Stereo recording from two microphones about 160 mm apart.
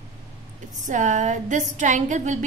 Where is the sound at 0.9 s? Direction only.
50° right (ahead or behind).